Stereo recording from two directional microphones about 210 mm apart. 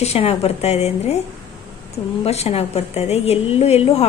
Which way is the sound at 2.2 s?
30° left (ahead or behind).